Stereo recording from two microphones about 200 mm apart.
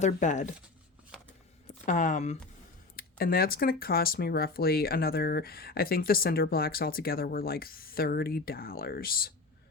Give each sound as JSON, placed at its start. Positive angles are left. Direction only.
{"t": 0.0, "sound": "speech", "side_deg": 35}
{"t": 1.1, "sound": "shuffling cards", "side_deg": 0}
{"t": 1.6, "sound": "speech", "side_deg": 40}
{"t": 2.9, "sound": "speech", "side_deg": 50}